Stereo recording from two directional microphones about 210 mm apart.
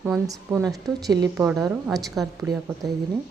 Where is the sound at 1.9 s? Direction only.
Centre (ahead or behind).